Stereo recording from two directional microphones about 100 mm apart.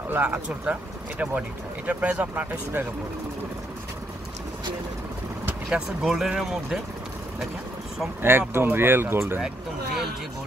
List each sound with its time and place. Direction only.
0.1 s speech: 15° right (ahead or behind)
5.9 s speech: 5° right (ahead or behind)
8.2 s speech: 25° right (ahead or behind)